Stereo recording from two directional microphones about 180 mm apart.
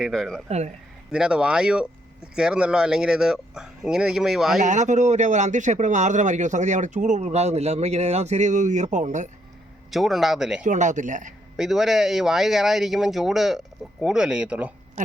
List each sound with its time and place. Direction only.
0.0 s speech: centre (ahead or behind)
0.4 s a man's voice: 35° right (ahead or behind)
1.1 s speech: 5° right (ahead or behind)
4.6 s a man's voice: 40° right (ahead or behind)
9.9 s speech: centre (ahead or behind)
10.6 s speech: 40° right (ahead or behind)
11.5 s speech: centre (ahead or behind)